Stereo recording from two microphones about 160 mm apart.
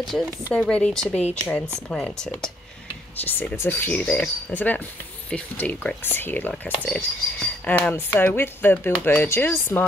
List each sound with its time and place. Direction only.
0.0 s speech: centre (ahead or behind)
1.1 s speech: 45° left (ahead or behind)
1.9 s speech: 5° left (ahead or behind)